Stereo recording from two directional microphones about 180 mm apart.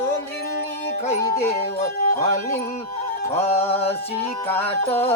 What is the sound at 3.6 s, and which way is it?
Music, 35° left (ahead or behind).